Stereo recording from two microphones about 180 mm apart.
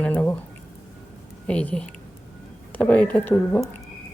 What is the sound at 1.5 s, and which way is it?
Speech, 5° left (ahead or behind).